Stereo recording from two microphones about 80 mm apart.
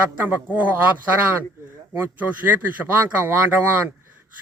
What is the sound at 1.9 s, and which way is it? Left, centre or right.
Speech, right.